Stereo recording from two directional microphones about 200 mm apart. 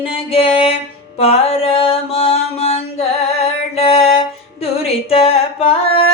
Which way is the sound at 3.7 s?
30° left (ahead or behind).